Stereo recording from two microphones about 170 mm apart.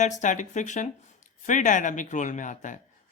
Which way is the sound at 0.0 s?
45° left (ahead or behind).